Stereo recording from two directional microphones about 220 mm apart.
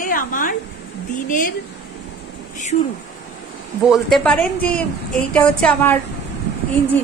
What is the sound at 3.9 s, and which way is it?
A woman's voice, centre (ahead or behind).